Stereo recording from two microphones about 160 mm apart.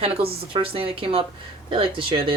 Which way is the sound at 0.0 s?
35° right (ahead or behind).